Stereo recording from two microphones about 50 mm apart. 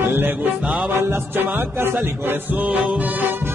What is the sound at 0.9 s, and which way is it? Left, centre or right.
Music, right.